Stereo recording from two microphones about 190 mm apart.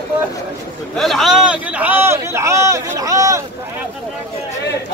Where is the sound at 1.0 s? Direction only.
Centre (ahead or behind); by 3.4 s 15° right (ahead or behind).